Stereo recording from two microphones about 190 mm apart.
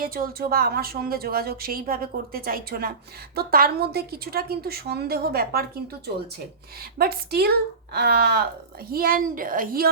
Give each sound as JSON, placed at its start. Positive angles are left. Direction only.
{"t": 0.0, "sound": "a woman's voice", "side_deg": -50}
{"t": 7.0, "sound": "a woman's voice", "side_deg": -55}